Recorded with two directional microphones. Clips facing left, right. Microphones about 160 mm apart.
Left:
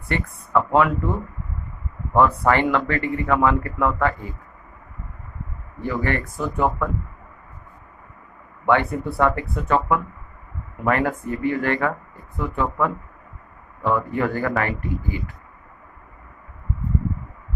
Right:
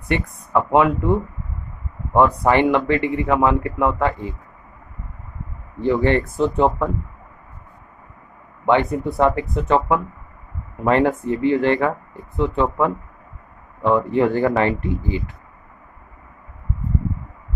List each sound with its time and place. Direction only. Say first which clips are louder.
0.1 s speech: right 2 dB; 20° right (ahead or behind)
5.8 s speech: right 7 dB; 25° right (ahead or behind)
8.6 s speech: right 2 dB; 20° right (ahead or behind)
13.9 s speech: right 7 dB; 20° right (ahead or behind)